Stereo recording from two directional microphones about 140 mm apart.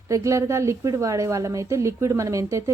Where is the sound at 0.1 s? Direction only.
20° right (ahead or behind).